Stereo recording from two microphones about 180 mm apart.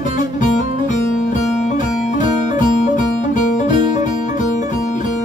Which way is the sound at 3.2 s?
45° left (ahead or behind).